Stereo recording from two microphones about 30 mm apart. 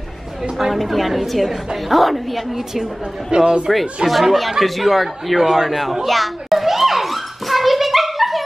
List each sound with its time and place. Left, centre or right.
0.6 s speech: centre
2.5 s a woman's voice: centre
3.3 s a man's voice: right
4.1 s speech: centre
6.0 s children playing: centre